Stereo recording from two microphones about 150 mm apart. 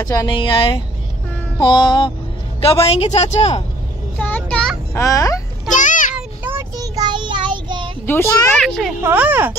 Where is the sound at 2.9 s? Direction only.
45° left (ahead or behind).